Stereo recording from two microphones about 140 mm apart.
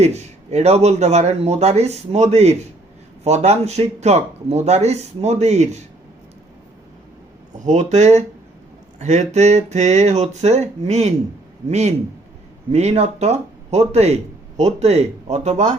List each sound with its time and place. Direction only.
0.0 s a man's voice: 50° right (ahead or behind)
7.6 s a man's voice: 60° right (ahead or behind)